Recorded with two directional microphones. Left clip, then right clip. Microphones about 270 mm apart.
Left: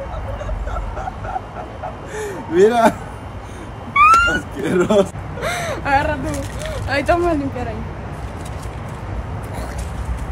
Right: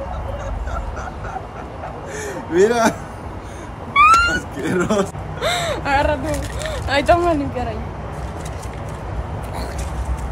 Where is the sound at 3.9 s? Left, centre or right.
Centre.